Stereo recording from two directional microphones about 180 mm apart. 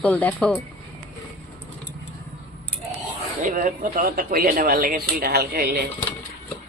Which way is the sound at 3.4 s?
45° right (ahead or behind).